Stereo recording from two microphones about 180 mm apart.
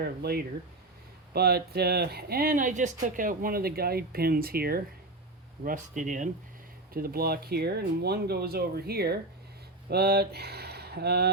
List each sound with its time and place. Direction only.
0.0 s speech: 60° right (ahead or behind)
5.6 s speech: 45° right (ahead or behind)
6.9 s speech: 55° right (ahead or behind)